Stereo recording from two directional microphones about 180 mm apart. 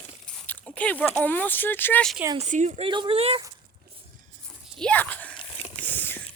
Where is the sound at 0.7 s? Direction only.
10° left (ahead or behind).